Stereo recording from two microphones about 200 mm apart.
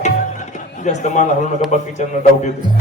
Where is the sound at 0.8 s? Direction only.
35° left (ahead or behind).